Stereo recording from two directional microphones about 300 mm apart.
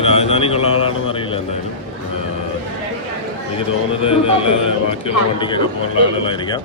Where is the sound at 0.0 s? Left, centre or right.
Centre.